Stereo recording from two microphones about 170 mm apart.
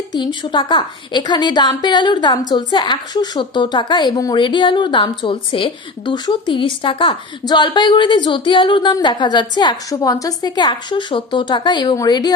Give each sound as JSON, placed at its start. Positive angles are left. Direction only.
{"t": 0.1, "sound": "a woman's voice", "side_deg": 25}